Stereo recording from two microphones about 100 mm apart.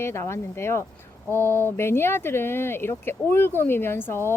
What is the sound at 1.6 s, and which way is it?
Speech, 25° left (ahead or behind).